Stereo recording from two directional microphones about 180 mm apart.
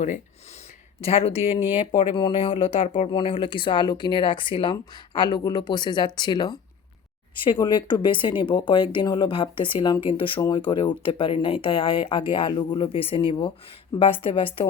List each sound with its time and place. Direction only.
1.0 s speech: 35° left (ahead or behind)